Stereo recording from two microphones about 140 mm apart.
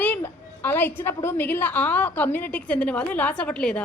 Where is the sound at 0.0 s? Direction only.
10° left (ahead or behind).